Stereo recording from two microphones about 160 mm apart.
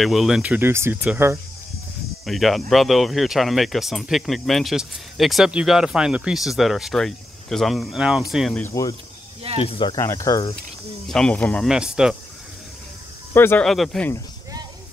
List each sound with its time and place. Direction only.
0.0 s speech: centre (ahead or behind)
2.2 s speech: centre (ahead or behind)
8.5 s speech: 15° left (ahead or behind)
9.6 s speech: 30° left (ahead or behind)
9.9 s speech: 20° left (ahead or behind)
11.1 s speech: 5° left (ahead or behind)
11.7 s speech: 5° right (ahead or behind)
13.3 s speech: 15° left (ahead or behind)